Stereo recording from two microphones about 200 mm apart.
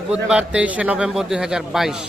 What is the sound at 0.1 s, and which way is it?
A man's voice, 5° right (ahead or behind).